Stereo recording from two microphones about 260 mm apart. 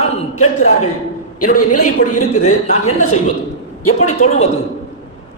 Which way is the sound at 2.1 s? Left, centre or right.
Left.